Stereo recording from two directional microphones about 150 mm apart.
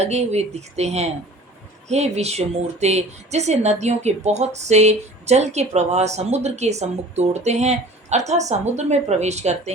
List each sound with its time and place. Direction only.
0.0 s a woman's voice: 45° right (ahead or behind)